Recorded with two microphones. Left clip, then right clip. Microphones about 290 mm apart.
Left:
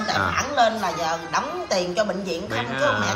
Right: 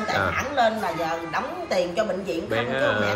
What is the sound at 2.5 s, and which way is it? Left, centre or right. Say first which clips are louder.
Speech: even; centre.